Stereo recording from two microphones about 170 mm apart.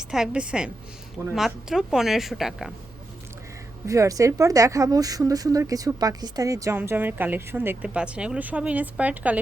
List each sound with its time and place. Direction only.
0.1 s speech: 5° right (ahead or behind)
3.8 s a woman's voice: 20° right (ahead or behind)